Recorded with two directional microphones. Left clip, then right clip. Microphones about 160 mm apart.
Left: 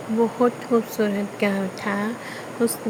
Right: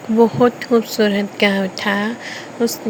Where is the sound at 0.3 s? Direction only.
20° right (ahead or behind).